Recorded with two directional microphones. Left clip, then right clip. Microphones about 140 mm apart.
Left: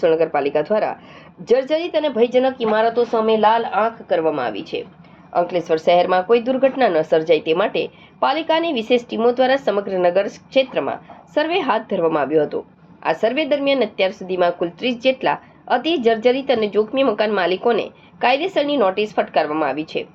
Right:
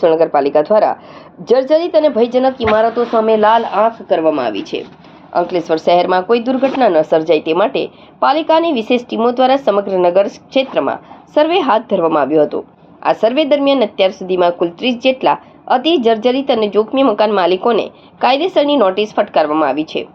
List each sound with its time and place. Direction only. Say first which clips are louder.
0.0 s a woman's voice: right 5 dB; 25° right (ahead or behind); by 4.9 s 55° right (ahead or behind)
5.3 s a woman's voice: right 3 dB; 35° right (ahead or behind)